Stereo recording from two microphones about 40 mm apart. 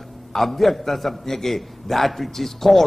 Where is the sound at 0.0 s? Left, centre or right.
Centre.